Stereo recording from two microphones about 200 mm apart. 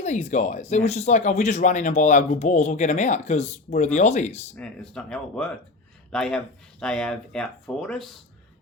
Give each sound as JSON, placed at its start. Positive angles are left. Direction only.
{"t": 0.0, "sound": "speech", "side_deg": 35}
{"t": 4.5, "sound": "speech", "side_deg": 5}